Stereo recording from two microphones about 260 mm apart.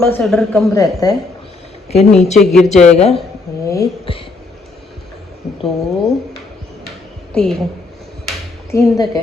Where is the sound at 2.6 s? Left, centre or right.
Left.